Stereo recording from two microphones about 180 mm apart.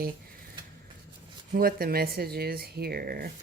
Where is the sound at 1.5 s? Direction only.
55° right (ahead or behind).